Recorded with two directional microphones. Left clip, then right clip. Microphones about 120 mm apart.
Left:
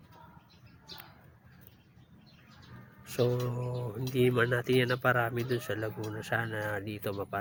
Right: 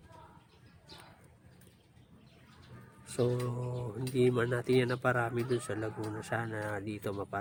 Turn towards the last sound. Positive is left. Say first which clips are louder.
# left 2 dB
turn(degrees=-10)  # may be behind; listen again after turning